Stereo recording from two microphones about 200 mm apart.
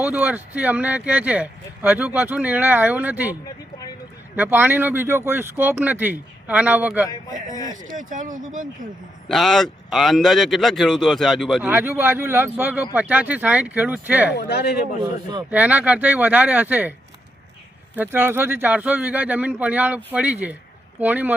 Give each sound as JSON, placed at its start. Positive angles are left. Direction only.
{"t": 0.0, "sound": "speech", "side_deg": -5}
{"t": 4.4, "sound": "speech", "side_deg": -10}
{"t": 7.7, "sound": "speech", "side_deg": -40}
{"t": 9.3, "sound": "speech", "side_deg": 0}
{"t": 11.7, "sound": "speech", "side_deg": -10}
{"t": 14.3, "sound": "speech", "side_deg": 55}
{"t": 15.4, "sound": "speech", "side_deg": -5}
{"t": 17.9, "sound": "speech", "side_deg": -10}